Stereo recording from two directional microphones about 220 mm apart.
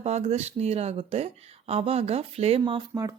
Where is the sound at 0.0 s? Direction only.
30° right (ahead or behind).